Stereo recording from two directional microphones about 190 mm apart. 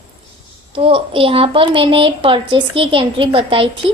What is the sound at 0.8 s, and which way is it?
Speech, 30° right (ahead or behind).